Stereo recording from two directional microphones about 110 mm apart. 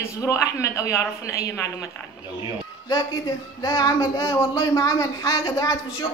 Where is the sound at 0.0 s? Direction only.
30° left (ahead or behind).